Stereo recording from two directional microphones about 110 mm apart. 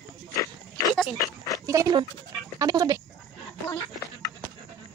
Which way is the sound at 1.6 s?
30° right (ahead or behind).